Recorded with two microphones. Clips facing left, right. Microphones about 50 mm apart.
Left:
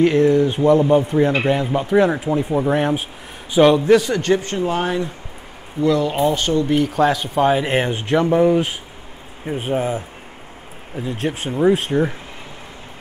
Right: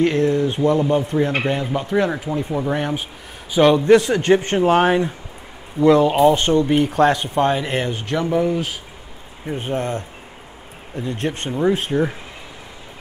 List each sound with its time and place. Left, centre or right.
0.2 s speech: left
0.5 s speech: centre
4.2 s speech: right
4.6 s speech: right
7.3 s speech: centre
7.8 s speech: centre